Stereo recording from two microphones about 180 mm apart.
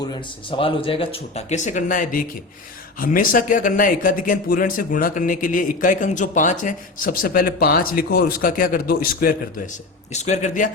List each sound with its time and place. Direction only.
0.0 s a man's voice: 25° left (ahead or behind); by 9.3 s 55° left (ahead or behind)
10.1 s speech: 40° left (ahead or behind)